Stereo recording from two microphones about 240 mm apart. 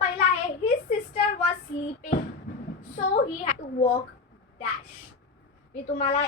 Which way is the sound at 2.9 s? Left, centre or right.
Left.